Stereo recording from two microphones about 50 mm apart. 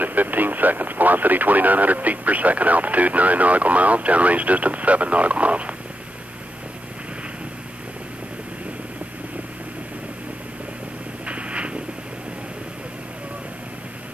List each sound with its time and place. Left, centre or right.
0.0 s speech: right
11.2 s vehicle: right